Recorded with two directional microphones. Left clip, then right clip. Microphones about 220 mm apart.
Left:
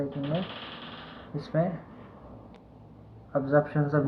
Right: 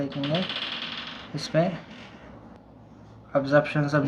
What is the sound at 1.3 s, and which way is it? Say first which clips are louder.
Speech: right 4 dB; 25° right (ahead or behind).